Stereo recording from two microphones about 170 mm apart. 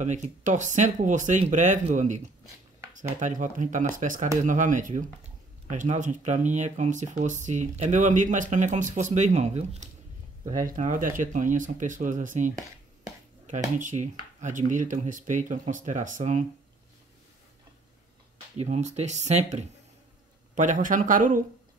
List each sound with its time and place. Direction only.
0.0 s speech: 45° right (ahead or behind)
10.7 s speech: 50° right (ahead or behind)
18.6 s speech: 45° right (ahead or behind)